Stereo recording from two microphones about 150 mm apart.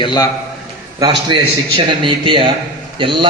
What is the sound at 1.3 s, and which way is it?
A man's voice, 30° right (ahead or behind).